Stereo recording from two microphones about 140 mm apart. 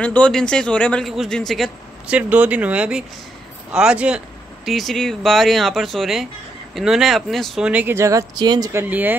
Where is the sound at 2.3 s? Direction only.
10° right (ahead or behind).